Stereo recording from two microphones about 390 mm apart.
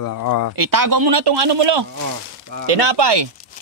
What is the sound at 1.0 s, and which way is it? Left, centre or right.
Speech, right.